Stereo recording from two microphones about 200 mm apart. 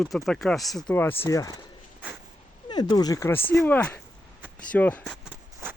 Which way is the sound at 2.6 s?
20° left (ahead or behind).